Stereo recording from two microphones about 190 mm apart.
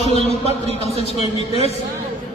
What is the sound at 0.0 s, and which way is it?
Music, 35° left (ahead or behind).